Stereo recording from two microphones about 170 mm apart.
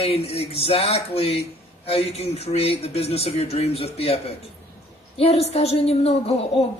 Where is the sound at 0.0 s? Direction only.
35° left (ahead or behind).